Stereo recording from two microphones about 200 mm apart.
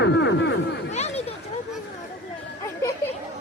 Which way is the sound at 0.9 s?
35° left (ahead or behind).